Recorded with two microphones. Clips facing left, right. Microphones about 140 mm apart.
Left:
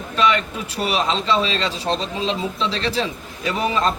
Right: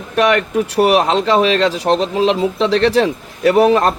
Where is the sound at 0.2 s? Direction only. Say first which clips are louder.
Right 6 dB; 75° right (ahead or behind).